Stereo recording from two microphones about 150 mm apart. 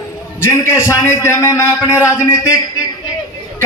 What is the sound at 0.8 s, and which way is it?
A man's voice, 15° left (ahead or behind).